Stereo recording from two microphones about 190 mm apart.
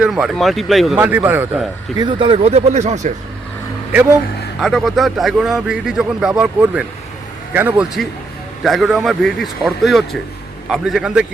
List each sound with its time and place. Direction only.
0.0 s a man's voice: centre (ahead or behind)
2.0 s speech: 25° right (ahead or behind)
4.6 s a man's voice: centre (ahead or behind)